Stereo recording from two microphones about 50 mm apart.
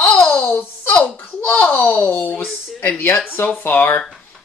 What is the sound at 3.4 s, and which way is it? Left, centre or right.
Speech, left.